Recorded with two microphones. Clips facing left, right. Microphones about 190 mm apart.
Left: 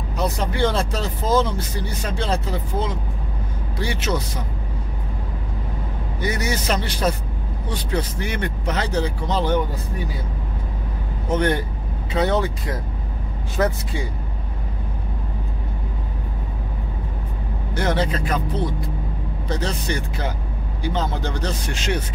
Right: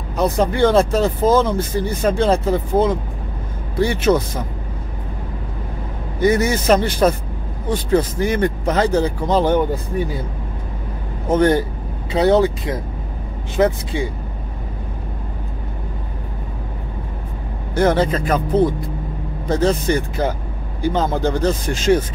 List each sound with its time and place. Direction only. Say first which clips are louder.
0.1 s speech: right 7 dB; 50° right (ahead or behind)
6.2 s speech: right 9 dB; 50° right (ahead or behind)
11.2 s a man's voice: right 6 dB; 40° right (ahead or behind)
13.6 s speech: right 5 dB; 20° right (ahead or behind)
17.7 s speech: right 6 dB; 45° right (ahead or behind)